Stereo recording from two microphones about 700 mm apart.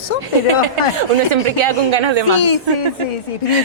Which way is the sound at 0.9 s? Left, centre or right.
Right.